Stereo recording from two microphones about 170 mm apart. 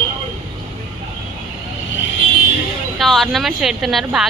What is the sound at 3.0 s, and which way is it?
Speech, centre (ahead or behind).